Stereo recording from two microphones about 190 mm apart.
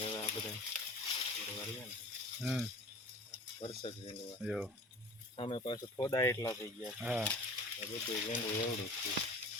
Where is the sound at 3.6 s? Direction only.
30° left (ahead or behind).